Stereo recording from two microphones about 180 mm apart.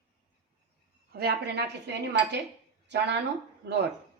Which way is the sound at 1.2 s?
65° right (ahead or behind).